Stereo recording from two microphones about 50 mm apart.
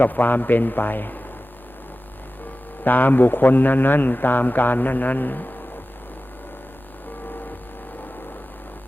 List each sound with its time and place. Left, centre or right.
0.0 s a man's voice: left
2.8 s a man's voice: left